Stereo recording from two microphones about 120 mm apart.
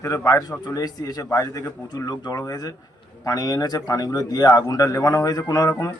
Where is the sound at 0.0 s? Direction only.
25° left (ahead or behind).